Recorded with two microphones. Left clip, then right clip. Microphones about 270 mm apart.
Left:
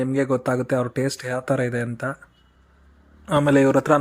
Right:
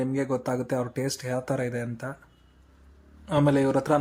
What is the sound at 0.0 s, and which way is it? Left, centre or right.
Speech, centre.